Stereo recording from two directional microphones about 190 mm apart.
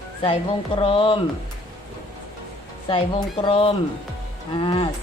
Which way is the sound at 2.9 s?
25° left (ahead or behind).